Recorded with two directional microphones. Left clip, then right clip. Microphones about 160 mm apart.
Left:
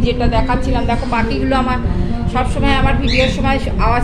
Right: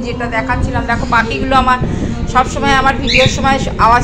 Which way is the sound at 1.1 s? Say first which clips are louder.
Right 7 dB; 20° left (ahead or behind).